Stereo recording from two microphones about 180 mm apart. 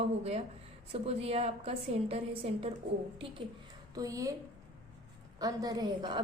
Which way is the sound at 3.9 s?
20° right (ahead or behind).